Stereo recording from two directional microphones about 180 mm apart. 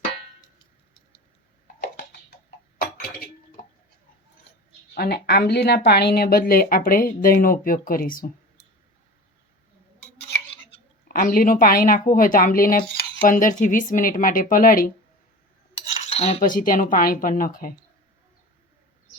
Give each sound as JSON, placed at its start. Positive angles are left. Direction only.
{"t": 4.9, "sound": "speech", "side_deg": 60}
{"t": 11.1, "sound": "speech", "side_deg": 50}
{"t": 15.7, "sound": "cutlery", "side_deg": 35}
{"t": 16.6, "sound": "speech", "side_deg": 50}